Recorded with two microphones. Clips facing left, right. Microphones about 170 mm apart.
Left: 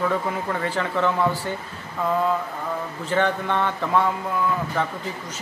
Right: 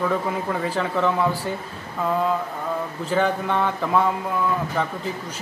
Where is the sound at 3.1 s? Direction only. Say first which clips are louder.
Even; 5° right (ahead or behind).